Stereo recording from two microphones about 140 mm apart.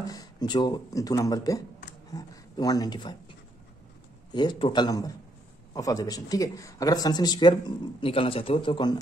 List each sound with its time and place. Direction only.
0.0 s a man's voice: 25° left (ahead or behind)